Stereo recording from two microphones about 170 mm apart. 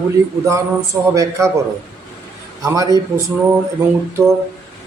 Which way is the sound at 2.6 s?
20° right (ahead or behind).